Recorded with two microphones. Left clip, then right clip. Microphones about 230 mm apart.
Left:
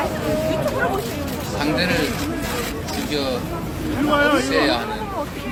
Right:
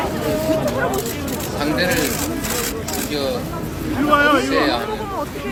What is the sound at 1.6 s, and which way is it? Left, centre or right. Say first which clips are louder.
Speech: right 1 dB; left.